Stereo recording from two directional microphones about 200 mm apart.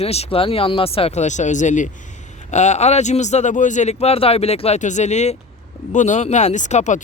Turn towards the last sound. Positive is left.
turn(degrees=35)  # may be behind; listen again after turning